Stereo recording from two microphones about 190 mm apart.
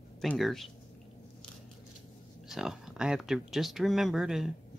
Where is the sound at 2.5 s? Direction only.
5° right (ahead or behind).